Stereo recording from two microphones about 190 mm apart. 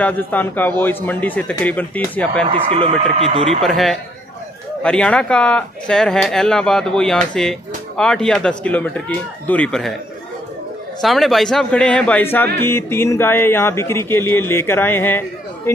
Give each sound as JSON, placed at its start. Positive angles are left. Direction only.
{"t": 0.0, "sound": "a man's voice", "side_deg": 10}
{"t": 2.4, "sound": "speech", "side_deg": -30}
{"t": 3.6, "sound": "speech", "side_deg": 0}
{"t": 11.0, "sound": "a man's voice", "side_deg": 0}